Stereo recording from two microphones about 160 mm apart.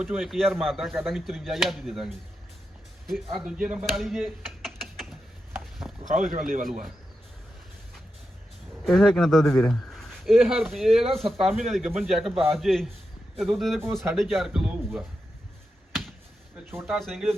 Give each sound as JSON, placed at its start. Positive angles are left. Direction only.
{"t": 0.0, "sound": "speech", "side_deg": 0}
{"t": 3.3, "sound": "speech", "side_deg": -5}
{"t": 5.8, "sound": "a sound", "side_deg": 0}
{"t": 8.8, "sound": "speech", "side_deg": 5}
{"t": 11.0, "sound": "speech", "side_deg": -40}
{"t": 11.3, "sound": "speech", "side_deg": 0}
{"t": 16.7, "sound": "speech", "side_deg": -5}